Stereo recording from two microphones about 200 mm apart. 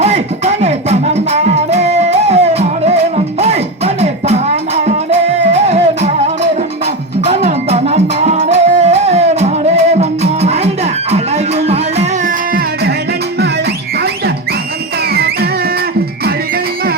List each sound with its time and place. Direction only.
0.0 s music: 30° right (ahead or behind)
15.1 s music: 50° right (ahead or behind)